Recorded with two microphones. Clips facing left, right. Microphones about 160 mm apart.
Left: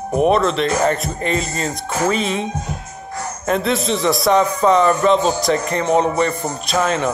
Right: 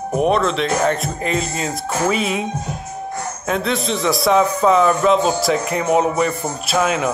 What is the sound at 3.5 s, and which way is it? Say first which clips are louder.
Speech: left 2 dB; centre (ahead or behind).